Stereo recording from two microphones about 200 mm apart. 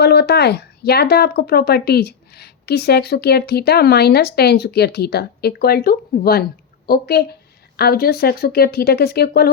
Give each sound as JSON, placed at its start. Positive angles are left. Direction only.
{"t": 0.0, "sound": "speech", "side_deg": 55}